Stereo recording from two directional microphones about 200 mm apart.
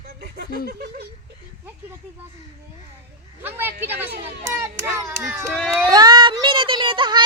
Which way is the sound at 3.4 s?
10° right (ahead or behind).